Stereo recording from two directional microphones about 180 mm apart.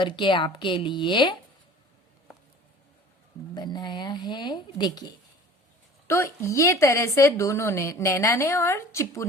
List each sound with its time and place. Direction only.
0.0 s a woman's voice: 25° left (ahead or behind)
3.5 s a woman's voice: 25° left (ahead or behind)